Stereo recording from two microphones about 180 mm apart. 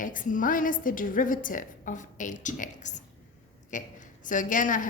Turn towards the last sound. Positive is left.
turn(degrees=45)  # may be behind; listen again after turning